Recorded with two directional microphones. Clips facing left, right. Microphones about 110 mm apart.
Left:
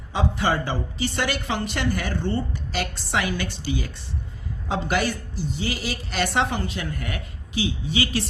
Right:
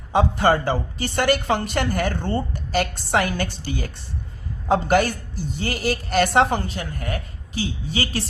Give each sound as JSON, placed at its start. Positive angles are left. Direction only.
{"t": 0.1, "sound": "a woman's voice", "side_deg": -50}